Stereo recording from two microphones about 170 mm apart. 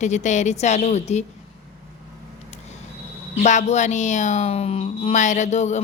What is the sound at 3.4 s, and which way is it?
A woman's voice, 45° left (ahead or behind).